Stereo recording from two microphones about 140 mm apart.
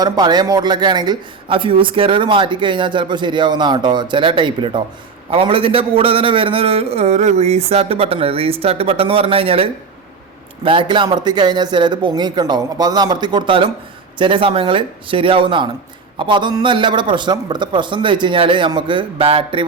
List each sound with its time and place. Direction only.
0.0 s a man's voice: 30° right (ahead or behind)